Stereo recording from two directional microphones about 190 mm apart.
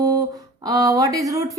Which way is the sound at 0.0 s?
20° right (ahead or behind).